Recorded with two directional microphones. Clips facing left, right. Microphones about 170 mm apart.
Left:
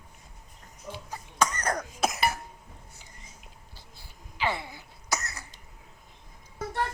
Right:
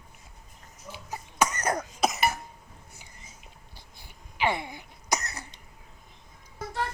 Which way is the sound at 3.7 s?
15° right (ahead or behind).